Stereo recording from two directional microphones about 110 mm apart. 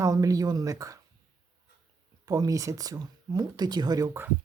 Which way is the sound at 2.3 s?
30° right (ahead or behind).